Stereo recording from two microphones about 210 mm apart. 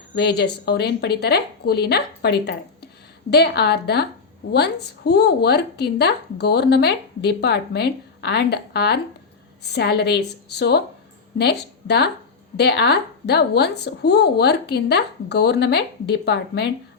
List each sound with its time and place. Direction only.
0.2 s speech: 50° left (ahead or behind)